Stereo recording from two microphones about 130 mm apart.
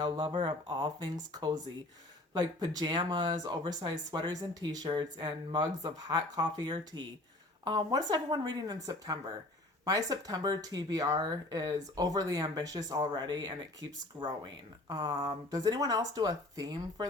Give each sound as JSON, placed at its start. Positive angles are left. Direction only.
{"t": 0.0, "sound": "speech", "side_deg": -35}